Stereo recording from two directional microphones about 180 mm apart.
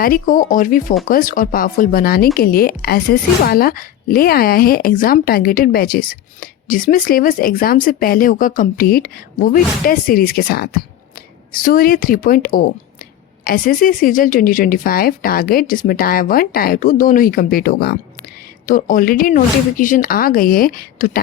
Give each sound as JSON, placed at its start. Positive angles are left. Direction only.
{"t": 0.0, "sound": "speech", "side_deg": 50}